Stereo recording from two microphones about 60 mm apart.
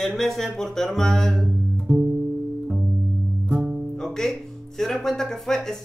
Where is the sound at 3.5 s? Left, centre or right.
Right.